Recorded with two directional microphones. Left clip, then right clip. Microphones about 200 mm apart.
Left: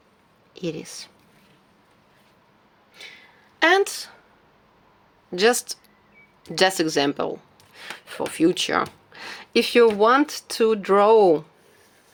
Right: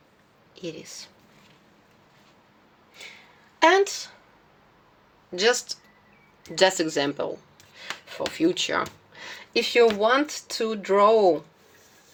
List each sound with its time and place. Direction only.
0.5 s speech: 55° left (ahead or behind)
2.9 s a sound: centre (ahead or behind)
3.6 s a sound: 25° left (ahead or behind)
3.8 s speech: 40° left (ahead or behind)
5.3 s speech: 40° left (ahead or behind)
6.5 s speech: 30° left (ahead or behind)
7.8 s speech: 50° left (ahead or behind)